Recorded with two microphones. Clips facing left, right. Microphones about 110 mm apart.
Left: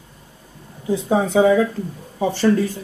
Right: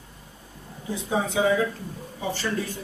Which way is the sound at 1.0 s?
60° left (ahead or behind).